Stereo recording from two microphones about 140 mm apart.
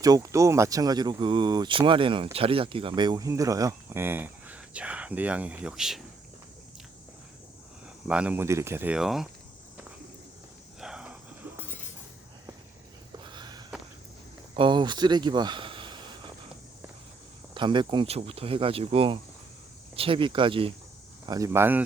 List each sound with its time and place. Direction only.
0.0 s speech: 25° right (ahead or behind); by 6.0 s 5° right (ahead or behind)
8.0 s speech: 10° right (ahead or behind)
9.0 s speech: 5° right (ahead or behind)
10.8 s a sound: 5° right (ahead or behind)
13.3 s a sound: 30° right (ahead or behind)
14.5 s speech: 35° right (ahead or behind)
17.5 s speech: 35° right (ahead or behind)
21.2 s speech: 25° right (ahead or behind)